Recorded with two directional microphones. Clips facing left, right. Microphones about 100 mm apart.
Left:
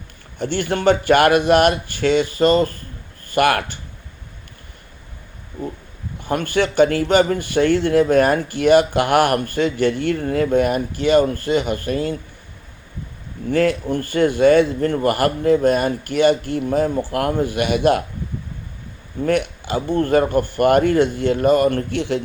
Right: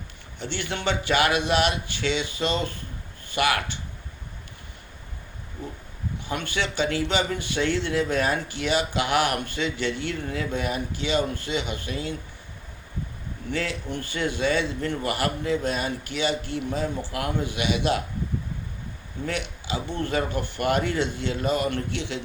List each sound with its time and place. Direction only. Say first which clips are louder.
0.3 s speech: left 10 dB; 50° left (ahead or behind)
6.2 s speech: left 10 dB; 50° left (ahead or behind)
13.5 s speech: left 12 dB; 50° left (ahead or behind)
19.2 s speech: left 11 dB; 50° left (ahead or behind)